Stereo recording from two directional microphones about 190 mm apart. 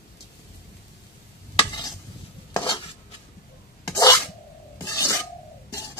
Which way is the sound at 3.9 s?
20° left (ahead or behind).